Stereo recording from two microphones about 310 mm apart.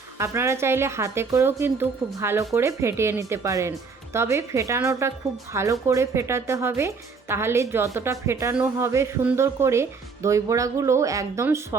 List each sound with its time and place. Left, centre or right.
0.2 s speech: centre